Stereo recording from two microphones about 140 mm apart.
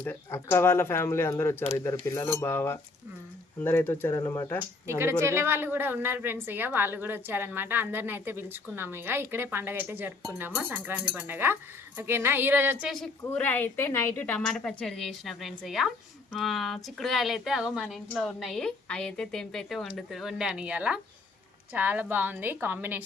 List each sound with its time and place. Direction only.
0.0 s a woman's voice: 15° left (ahead or behind)
4.9 s a woman's voice: 20° right (ahead or behind)
13.2 s a woman's voice: 15° left (ahead or behind); by 23.0 s 10° right (ahead or behind)